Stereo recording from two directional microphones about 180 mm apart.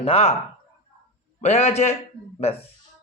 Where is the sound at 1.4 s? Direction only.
40° left (ahead or behind).